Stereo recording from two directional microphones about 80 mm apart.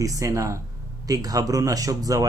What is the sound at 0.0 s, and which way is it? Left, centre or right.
Speech, right.